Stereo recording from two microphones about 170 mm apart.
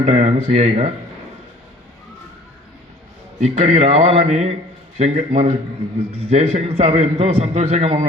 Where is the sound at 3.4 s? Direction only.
40° right (ahead or behind).